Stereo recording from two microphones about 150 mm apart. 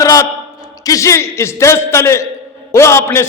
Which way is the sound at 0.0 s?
20° left (ahead or behind).